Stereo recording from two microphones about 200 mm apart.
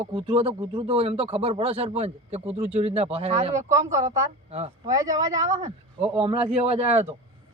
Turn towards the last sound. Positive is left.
turn(degrees=-30)  # may be behind; listen again after turning